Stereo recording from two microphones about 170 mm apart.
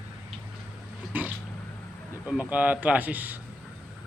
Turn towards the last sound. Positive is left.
turn(degrees=-10)  # may be behind; listen again after turning